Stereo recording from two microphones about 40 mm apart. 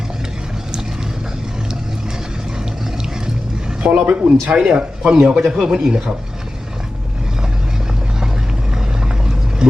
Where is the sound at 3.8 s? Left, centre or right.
Right.